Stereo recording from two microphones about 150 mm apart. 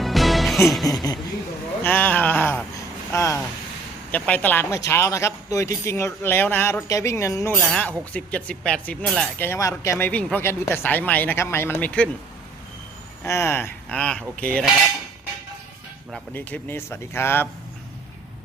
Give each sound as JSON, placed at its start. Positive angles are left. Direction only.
{"t": 0.0, "sound": "music", "side_deg": 0}
{"t": 1.8, "sound": "a sound", "side_deg": 10}
{"t": 4.1, "sound": "speech", "side_deg": 10}
{"t": 10.1, "sound": "speech", "side_deg": 10}
{"t": 13.2, "sound": "speech", "side_deg": 20}
{"t": 16.3, "sound": "speech", "side_deg": 10}